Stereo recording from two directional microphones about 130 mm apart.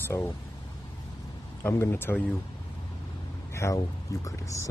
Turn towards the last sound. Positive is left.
turn(degrees=25)  # may be behind; listen again after turning